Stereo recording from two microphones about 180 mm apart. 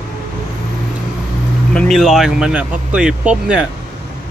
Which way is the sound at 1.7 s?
Centre (ahead or behind).